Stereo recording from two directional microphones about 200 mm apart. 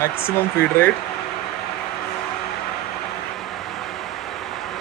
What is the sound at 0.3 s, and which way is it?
Speech, 10° left (ahead or behind).